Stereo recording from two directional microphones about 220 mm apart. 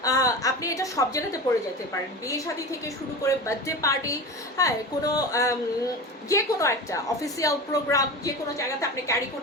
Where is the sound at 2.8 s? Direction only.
15° left (ahead or behind).